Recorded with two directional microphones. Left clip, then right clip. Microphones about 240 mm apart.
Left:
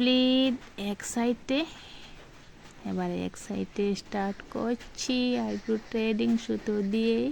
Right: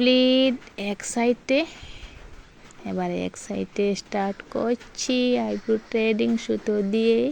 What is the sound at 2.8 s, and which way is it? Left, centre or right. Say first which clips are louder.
Speech: right 5 dB; centre.